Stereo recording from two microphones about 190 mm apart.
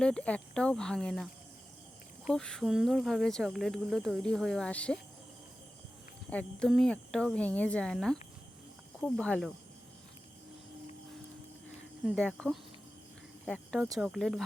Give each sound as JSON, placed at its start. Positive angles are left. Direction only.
{"t": 0.0, "sound": "speech", "side_deg": 5}
{"t": 6.3, "sound": "speech", "side_deg": 5}
{"t": 12.0, "sound": "speech", "side_deg": 5}